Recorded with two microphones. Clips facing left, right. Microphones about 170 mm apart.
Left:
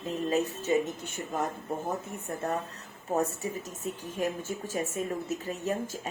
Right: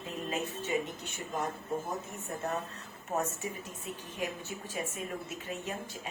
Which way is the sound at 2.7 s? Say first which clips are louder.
Left 5 dB; 35° left (ahead or behind).